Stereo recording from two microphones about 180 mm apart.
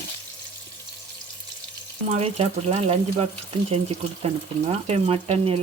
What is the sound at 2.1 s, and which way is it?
Speech, 35° right (ahead or behind).